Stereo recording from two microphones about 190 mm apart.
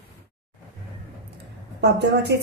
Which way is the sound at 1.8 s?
65° right (ahead or behind).